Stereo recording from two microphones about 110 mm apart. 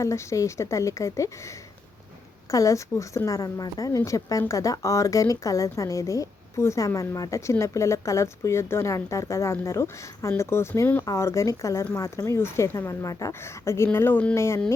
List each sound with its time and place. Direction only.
0.0 s a woman's voice: 25° left (ahead or behind)